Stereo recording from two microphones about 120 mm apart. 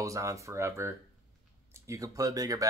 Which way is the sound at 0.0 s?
25° right (ahead or behind).